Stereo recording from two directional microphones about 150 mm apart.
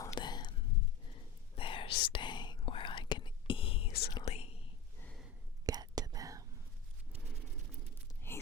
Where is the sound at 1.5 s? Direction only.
35° left (ahead or behind).